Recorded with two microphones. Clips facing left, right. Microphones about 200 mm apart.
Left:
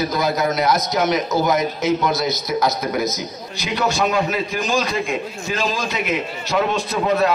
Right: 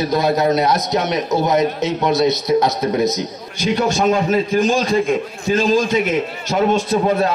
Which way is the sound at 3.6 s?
45° right (ahead or behind).